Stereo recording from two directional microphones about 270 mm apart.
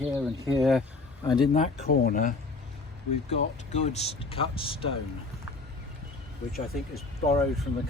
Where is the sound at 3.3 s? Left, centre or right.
Left.